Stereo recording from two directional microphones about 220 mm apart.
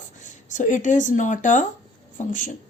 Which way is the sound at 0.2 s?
35° left (ahead or behind).